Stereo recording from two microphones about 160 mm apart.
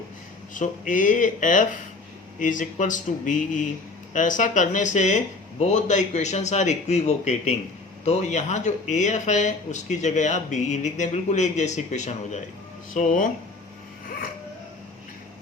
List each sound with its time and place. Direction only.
0.5 s speech: 55° left (ahead or behind)